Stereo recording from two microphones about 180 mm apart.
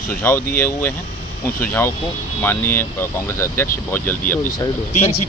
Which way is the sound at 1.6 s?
10° left (ahead or behind).